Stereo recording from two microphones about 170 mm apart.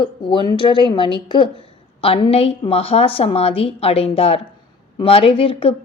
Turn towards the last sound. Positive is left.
turn(degrees=35)  # may be behind; listen again after turning